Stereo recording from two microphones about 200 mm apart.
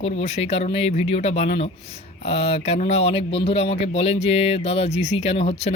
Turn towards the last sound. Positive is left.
turn(degrees=30)  # may be behind; listen again after turning